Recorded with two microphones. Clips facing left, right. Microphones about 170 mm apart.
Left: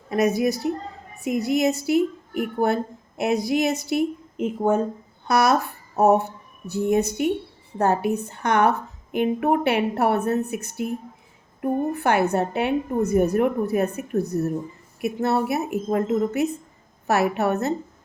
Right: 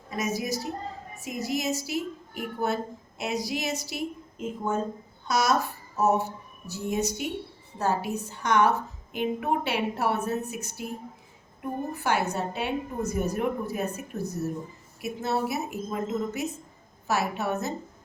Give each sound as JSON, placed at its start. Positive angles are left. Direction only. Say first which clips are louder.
{"t": 0.1, "sound": "a woman's voice", "louder": "left 9 dB", "side_deg": 60}